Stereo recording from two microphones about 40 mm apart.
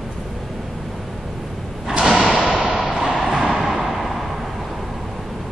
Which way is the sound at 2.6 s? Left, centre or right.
Centre.